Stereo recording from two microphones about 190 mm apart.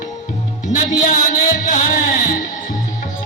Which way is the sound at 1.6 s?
40° left (ahead or behind).